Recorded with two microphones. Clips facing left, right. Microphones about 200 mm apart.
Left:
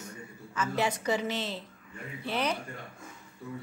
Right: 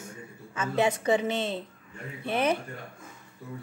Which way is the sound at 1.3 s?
55° right (ahead or behind).